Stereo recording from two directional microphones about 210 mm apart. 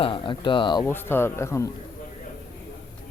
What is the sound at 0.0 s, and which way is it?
Speech, 25° left (ahead or behind).